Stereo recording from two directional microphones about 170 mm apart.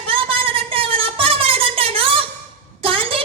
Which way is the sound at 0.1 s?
30° right (ahead or behind).